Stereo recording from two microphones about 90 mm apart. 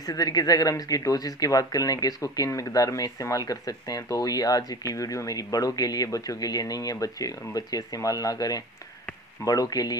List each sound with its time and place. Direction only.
0.0 s speech: 45° left (ahead or behind)